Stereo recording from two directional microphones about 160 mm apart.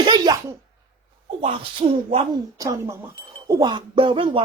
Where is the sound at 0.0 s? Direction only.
30° right (ahead or behind).